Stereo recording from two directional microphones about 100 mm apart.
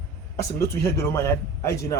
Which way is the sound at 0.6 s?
30° left (ahead or behind).